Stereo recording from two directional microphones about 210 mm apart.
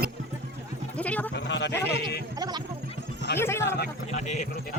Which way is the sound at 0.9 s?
5° left (ahead or behind).